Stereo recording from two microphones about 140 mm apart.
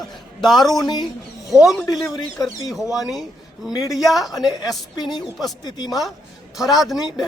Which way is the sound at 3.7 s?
30° left (ahead or behind).